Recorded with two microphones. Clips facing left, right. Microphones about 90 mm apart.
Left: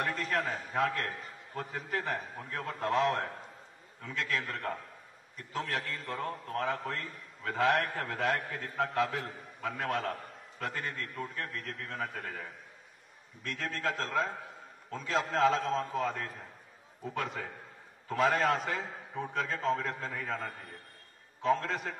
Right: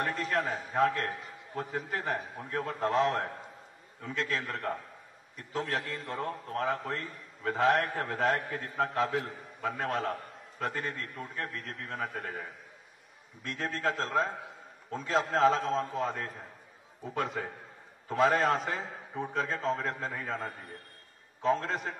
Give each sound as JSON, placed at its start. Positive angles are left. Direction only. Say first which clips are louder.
{"t": 0.0, "sound": "a sound", "louder": "right 2 dB", "side_deg": -35}
{"t": 0.7, "sound": "a man's voice", "louder": "right 3 dB", "side_deg": -35}
{"t": 21.4, "sound": "a man's voice", "louder": "right 1 dB", "side_deg": -35}